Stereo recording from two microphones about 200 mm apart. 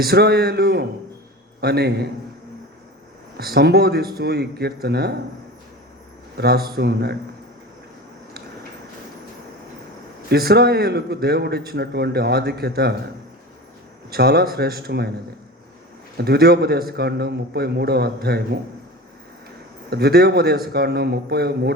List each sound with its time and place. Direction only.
0.0 s a man's voice: 50° right (ahead or behind)
3.3 s a man's voice: 50° right (ahead or behind)
6.3 s a man's voice: 50° right (ahead or behind)
10.2 s a man's voice: 50° right (ahead or behind)
14.1 s a man's voice: 50° right (ahead or behind)
16.1 s a man's voice: 50° right (ahead or behind)
19.9 s a man's voice: 50° right (ahead or behind)